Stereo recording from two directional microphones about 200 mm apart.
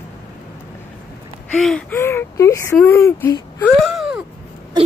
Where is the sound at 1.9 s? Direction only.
10° left (ahead or behind).